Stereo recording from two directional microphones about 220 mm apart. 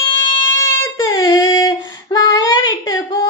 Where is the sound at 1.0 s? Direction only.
15° left (ahead or behind).